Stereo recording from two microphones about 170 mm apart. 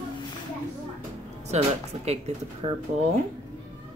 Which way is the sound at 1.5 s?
40° right (ahead or behind).